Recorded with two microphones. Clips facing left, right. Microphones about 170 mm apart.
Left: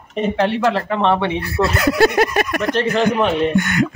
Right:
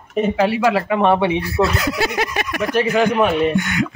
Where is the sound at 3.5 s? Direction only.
45° left (ahead or behind).